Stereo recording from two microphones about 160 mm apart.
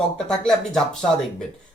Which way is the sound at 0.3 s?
5° left (ahead or behind).